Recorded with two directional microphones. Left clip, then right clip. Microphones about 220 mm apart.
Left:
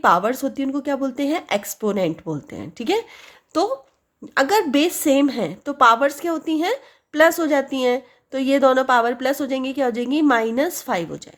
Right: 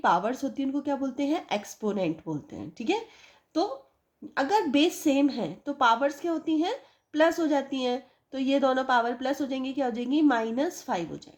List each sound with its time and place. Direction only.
0.0 s a woman's voice: 35° left (ahead or behind)
4.4 s a woman's voice: 35° left (ahead or behind)